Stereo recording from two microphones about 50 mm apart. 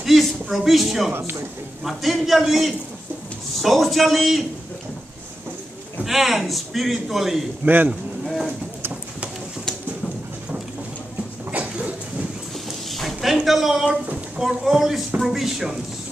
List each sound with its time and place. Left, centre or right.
0.0 s a man's voice: centre
6.0 s a man's voice: centre
7.6 s speech: right
11.5 s a sound: right
12.9 s a sound: centre
14.4 s speech: centre